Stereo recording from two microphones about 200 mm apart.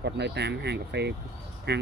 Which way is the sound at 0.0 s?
55° right (ahead or behind).